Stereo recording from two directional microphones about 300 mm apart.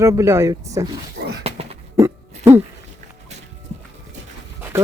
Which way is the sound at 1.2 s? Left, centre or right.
Right.